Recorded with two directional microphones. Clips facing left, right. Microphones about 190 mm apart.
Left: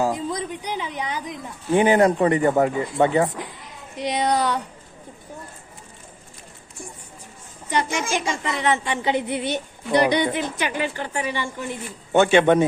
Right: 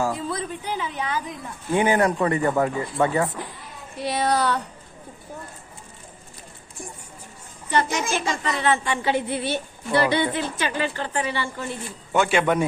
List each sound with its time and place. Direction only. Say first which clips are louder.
0.0 s a woman's voice: left 2 dB; 15° left (ahead or behind)
7.7 s a woman's voice: even; 15° left (ahead or behind)
12.2 s a woman's voice: left 5 dB; 25° left (ahead or behind)